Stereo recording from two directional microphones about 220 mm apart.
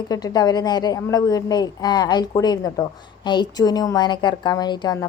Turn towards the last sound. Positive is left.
turn(degrees=20)  # may be behind; listen again after turning